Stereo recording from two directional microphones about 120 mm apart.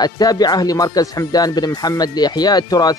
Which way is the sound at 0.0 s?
35° left (ahead or behind).